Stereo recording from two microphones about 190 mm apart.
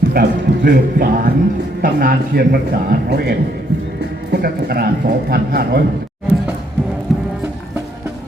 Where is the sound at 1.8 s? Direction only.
50° right (ahead or behind).